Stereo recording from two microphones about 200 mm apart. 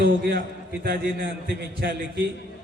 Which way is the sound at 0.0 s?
55° right (ahead or behind).